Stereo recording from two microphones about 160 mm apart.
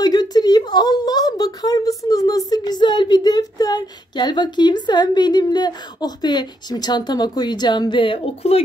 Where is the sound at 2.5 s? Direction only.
25° left (ahead or behind).